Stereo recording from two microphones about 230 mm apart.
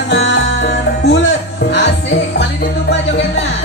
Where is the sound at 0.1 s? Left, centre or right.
Left.